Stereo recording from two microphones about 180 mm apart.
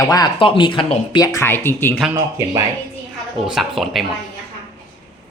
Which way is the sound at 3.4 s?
Centre (ahead or behind).